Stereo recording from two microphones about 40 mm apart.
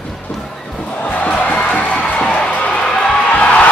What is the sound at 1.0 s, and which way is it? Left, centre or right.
Music, left.